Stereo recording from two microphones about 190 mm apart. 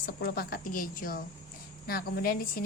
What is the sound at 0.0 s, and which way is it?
A woman's voice, 55° left (ahead or behind).